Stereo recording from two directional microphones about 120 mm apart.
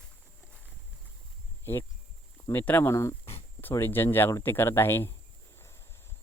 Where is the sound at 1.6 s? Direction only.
20° left (ahead or behind).